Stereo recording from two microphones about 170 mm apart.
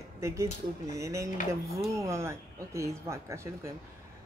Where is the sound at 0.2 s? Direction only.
20° right (ahead or behind).